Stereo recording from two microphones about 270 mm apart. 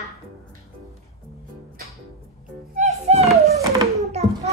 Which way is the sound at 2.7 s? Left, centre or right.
Right.